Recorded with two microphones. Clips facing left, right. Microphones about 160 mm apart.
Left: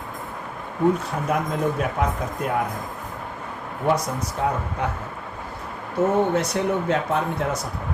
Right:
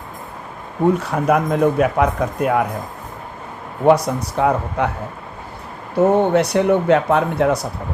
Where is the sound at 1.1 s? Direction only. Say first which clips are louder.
Right 7 dB; 85° right.